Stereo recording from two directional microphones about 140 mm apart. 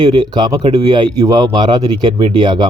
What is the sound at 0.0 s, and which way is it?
Speech, 30° right (ahead or behind).